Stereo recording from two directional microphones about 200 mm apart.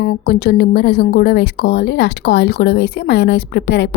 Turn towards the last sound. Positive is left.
turn(degrees=60)  # may be behind; listen again after turning